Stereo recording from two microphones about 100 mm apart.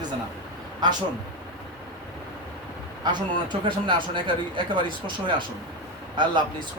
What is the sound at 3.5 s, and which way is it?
Speech, 50° right (ahead or behind).